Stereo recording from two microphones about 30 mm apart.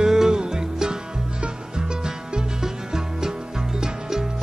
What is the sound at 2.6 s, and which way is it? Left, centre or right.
Music, centre.